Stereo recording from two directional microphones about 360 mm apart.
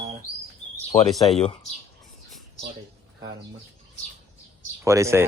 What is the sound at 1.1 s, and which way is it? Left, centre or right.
Speech, centre.